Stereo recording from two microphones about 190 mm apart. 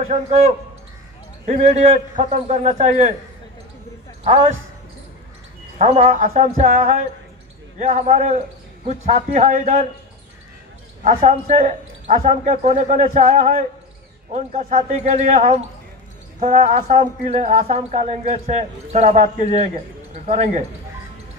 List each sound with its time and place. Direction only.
0.1 s speech: 35° right (ahead or behind)
4.2 s speech: 35° right (ahead or behind)
5.8 s speech: 35° right (ahead or behind)
11.1 s speech: 35° right (ahead or behind)